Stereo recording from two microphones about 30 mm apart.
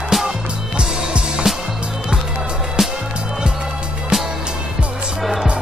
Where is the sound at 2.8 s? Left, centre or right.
Centre.